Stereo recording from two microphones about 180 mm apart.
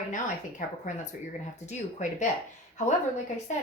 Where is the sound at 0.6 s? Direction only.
50° left (ahead or behind).